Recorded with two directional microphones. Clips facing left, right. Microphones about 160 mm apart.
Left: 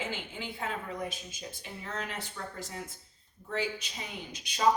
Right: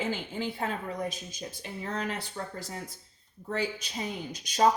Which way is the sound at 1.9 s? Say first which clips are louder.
Right 4 dB; 40° right (ahead or behind).